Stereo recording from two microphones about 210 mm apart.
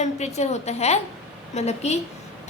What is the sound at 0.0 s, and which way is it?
A woman's voice, 30° left (ahead or behind).